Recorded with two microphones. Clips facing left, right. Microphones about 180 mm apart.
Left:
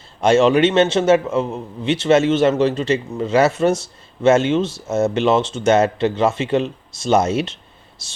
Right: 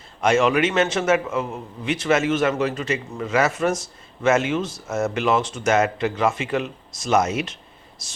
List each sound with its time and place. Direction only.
0.2 s a man's voice: 30° left (ahead or behind)